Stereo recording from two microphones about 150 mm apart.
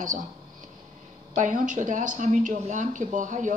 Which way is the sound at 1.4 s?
60° right (ahead or behind).